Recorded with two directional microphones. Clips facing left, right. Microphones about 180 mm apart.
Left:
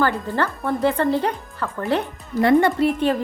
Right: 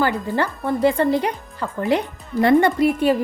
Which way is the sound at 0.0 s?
15° right (ahead or behind).